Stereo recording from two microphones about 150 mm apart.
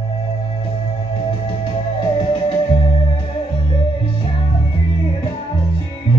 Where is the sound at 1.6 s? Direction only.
35° left (ahead or behind).